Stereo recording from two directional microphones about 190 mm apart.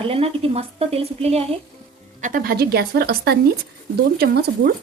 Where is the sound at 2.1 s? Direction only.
45° right (ahead or behind).